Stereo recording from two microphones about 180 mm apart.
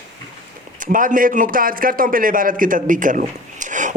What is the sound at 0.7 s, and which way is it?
A man's voice, 50° right (ahead or behind).